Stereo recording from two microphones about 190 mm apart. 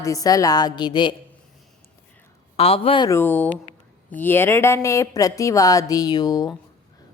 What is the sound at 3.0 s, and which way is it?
Speech, 10° left (ahead or behind).